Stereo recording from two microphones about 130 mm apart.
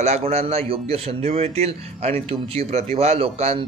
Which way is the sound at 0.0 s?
55° right (ahead or behind).